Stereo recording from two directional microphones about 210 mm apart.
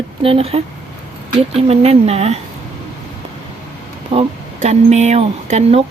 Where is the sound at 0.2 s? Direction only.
25° right (ahead or behind).